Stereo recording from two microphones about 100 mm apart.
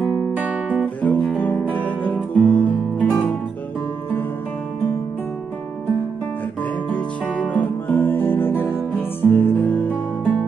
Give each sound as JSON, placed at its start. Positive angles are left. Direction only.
{"t": 0.4, "sound": "guitar", "side_deg": -10}
{"t": 1.0, "sound": "guitar", "side_deg": 15}
{"t": 6.9, "sound": "music", "side_deg": 15}